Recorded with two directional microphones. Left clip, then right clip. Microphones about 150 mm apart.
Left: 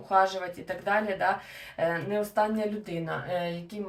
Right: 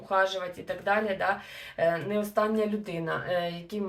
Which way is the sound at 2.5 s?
30° right (ahead or behind).